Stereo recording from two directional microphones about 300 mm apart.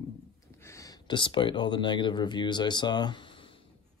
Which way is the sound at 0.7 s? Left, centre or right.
Centre.